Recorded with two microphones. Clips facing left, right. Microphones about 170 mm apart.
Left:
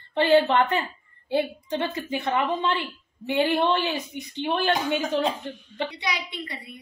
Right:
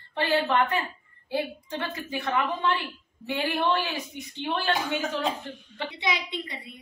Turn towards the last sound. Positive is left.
turn(degrees=-20)  # may be behind; listen again after turning